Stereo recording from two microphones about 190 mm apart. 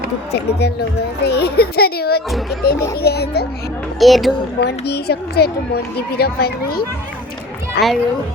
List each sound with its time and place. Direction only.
0.3 s a child's voice: 60° left (ahead or behind)
4.0 s speech: centre (ahead or behind)
4.6 s speech: 55° left (ahead or behind)